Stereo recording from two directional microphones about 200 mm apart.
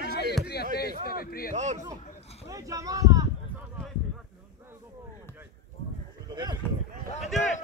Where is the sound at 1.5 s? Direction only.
35° right (ahead or behind).